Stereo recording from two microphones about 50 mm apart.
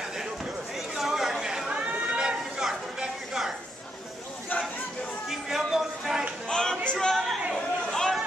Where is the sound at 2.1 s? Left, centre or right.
Centre.